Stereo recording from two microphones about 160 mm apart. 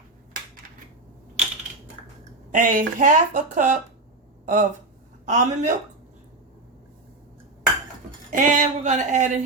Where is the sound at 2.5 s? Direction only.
55° right (ahead or behind).